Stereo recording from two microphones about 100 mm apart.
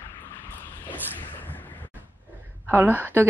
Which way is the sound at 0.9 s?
20° left (ahead or behind).